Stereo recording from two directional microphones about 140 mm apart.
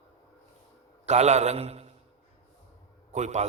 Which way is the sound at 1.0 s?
55° right (ahead or behind).